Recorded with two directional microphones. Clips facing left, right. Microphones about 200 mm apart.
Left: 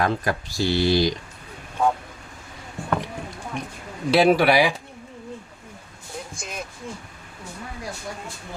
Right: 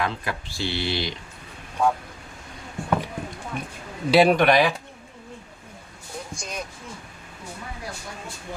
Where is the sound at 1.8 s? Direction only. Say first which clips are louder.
Even; centre (ahead or behind).